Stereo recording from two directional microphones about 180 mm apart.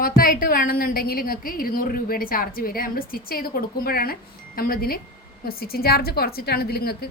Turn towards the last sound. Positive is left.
turn(degrees=60)  # may be behind; listen again after turning